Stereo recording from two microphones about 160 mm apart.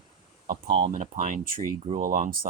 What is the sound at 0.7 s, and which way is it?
Speech, 35° right (ahead or behind).